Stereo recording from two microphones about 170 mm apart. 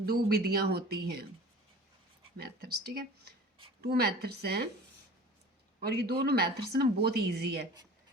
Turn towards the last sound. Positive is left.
turn(degrees=-70)  # may be behind; listen again after turning